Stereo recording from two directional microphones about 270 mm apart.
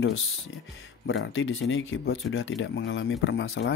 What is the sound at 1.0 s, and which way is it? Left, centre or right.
Speech, left.